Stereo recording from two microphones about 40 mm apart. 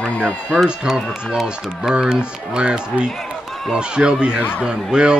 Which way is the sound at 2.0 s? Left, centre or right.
Right.